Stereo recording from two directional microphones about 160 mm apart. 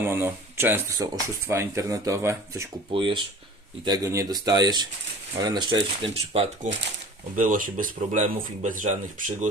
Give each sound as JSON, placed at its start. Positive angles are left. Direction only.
{"t": 0.0, "sound": "speech", "side_deg": -15}
{"t": 2.9, "sound": "speech", "side_deg": -30}
{"t": 7.3, "sound": "speech", "side_deg": -60}